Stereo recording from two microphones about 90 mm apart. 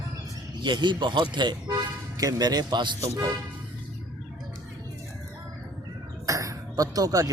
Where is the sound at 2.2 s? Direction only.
45° right (ahead or behind).